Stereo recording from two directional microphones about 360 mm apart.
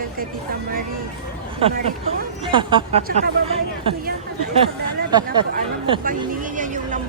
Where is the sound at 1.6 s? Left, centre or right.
Centre.